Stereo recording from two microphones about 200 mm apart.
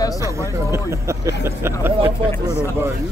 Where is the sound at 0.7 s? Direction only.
15° right (ahead or behind).